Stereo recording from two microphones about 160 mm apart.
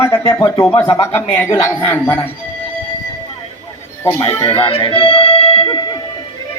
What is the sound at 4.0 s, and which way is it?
Speech, 15° left (ahead or behind).